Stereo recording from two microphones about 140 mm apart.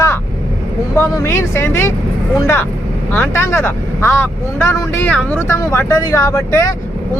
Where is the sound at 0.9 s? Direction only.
20° left (ahead or behind).